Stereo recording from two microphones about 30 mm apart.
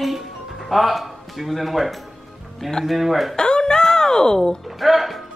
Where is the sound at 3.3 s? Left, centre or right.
Left.